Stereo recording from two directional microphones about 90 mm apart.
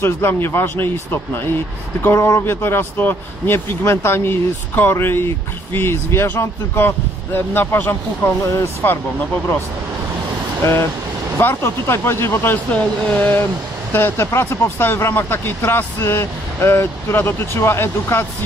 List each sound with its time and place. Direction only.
0.0 s speech: 25° left (ahead or behind)
10.6 s speech: 30° left (ahead or behind)